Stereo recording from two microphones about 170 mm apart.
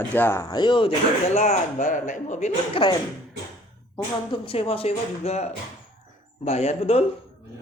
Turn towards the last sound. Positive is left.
turn(degrees=40)  # may be behind; listen again after turning